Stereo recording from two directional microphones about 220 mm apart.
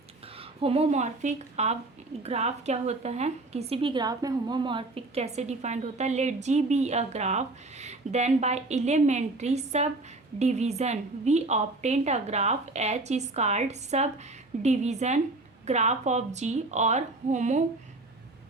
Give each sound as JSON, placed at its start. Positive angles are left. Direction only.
{"t": 0.3, "sound": "a woman's voice", "side_deg": -25}